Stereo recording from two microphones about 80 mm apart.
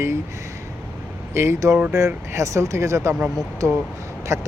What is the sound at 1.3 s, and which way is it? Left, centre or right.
Speech, right.